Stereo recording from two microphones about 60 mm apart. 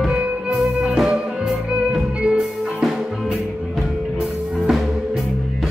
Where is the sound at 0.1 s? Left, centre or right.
Centre.